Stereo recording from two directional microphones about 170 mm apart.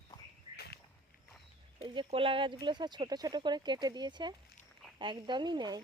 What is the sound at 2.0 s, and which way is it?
Speech, 30° right (ahead or behind).